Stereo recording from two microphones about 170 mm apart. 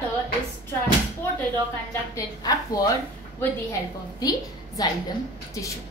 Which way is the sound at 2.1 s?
20° left (ahead or behind).